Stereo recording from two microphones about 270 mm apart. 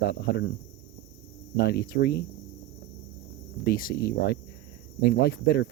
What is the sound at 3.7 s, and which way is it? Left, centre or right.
Speech, left.